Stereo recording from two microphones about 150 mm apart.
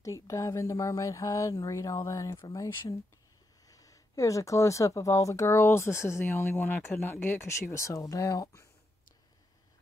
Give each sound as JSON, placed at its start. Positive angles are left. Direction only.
{"t": 0.0, "sound": "speech", "side_deg": 20}